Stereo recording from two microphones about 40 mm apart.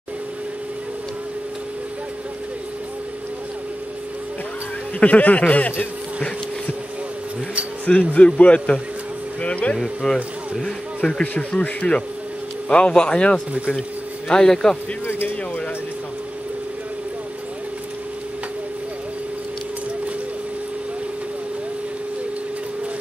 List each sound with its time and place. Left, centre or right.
5.0 s speech: left
7.9 s speech: left
10.0 s speech: centre
10.6 s speech: left
15.0 s speech: left